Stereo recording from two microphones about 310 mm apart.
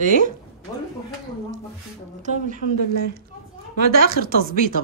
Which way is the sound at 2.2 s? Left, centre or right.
Right.